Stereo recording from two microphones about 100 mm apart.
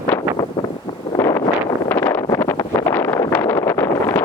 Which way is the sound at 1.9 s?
25° left (ahead or behind).